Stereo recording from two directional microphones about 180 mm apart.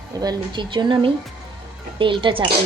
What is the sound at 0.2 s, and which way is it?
Speech, 25° right (ahead or behind).